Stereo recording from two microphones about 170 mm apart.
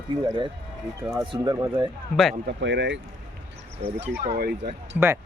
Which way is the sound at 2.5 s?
90° right.